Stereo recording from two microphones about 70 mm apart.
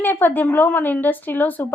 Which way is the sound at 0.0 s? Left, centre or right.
Left.